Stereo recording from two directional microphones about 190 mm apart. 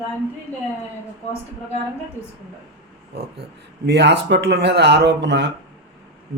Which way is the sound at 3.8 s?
60° right (ahead or behind).